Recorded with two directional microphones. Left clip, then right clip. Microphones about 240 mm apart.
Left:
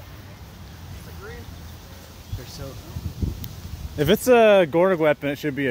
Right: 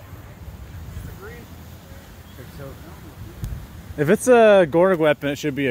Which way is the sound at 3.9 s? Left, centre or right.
Centre.